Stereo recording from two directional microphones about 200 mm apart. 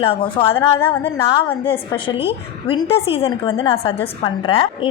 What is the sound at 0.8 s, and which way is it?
Speech, 10° left (ahead or behind).